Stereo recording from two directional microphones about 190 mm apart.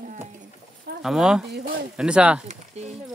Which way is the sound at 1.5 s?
50° right (ahead or behind).